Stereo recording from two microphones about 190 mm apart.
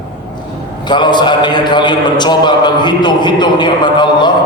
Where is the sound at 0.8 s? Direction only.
25° left (ahead or behind).